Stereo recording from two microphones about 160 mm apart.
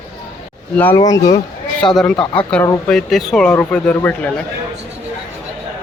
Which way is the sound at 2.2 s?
30° left (ahead or behind).